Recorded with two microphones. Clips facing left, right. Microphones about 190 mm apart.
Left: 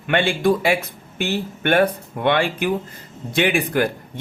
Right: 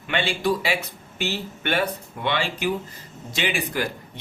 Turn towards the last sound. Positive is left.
turn(degrees=55)  # may be behind; listen again after turning